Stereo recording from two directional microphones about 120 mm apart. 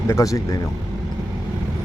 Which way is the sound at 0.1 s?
25° left (ahead or behind).